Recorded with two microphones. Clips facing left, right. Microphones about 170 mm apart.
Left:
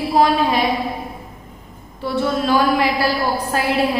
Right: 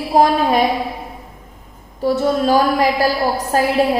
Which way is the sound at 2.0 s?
40° right (ahead or behind).